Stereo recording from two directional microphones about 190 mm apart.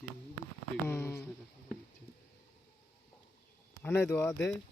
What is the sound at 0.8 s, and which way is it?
Speech, 10° left (ahead or behind).